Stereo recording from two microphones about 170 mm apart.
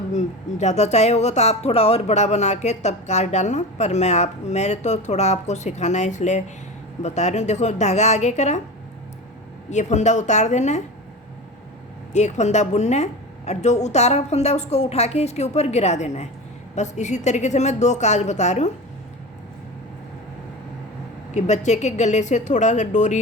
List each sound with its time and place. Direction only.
0.1 s a woman's voice: 40° left (ahead or behind)
9.6 s a woman's voice: 45° left (ahead or behind)
12.1 s a woman's voice: 40° left (ahead or behind)
21.3 s a woman's voice: 45° left (ahead or behind)